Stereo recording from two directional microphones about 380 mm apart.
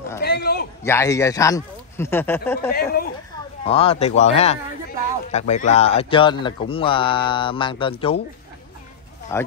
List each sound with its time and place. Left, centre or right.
0.2 s a sound: left
0.8 s speech: centre
2.7 s speech: left
9.3 s speech: centre